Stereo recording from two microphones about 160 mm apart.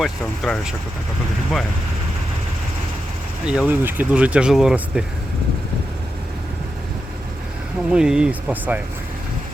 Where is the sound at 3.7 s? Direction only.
15° right (ahead or behind).